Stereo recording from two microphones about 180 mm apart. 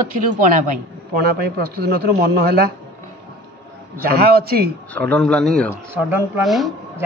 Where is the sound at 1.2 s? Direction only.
60° right (ahead or behind).